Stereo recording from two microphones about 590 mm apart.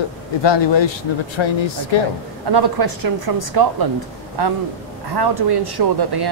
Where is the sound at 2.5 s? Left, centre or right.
Right.